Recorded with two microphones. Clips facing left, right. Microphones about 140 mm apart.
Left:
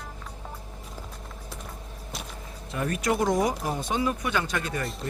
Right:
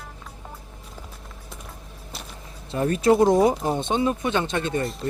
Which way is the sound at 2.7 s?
30° right (ahead or behind).